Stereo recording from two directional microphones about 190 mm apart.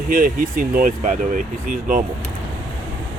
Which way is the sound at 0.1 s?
45° right (ahead or behind).